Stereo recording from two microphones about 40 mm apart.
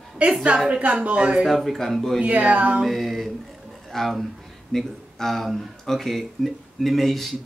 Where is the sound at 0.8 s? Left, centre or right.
Right.